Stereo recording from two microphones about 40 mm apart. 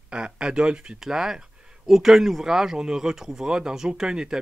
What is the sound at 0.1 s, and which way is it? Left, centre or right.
Speech, right.